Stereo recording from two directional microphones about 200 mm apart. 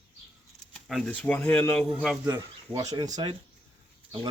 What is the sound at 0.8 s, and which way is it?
Speech, 5° left (ahead or behind).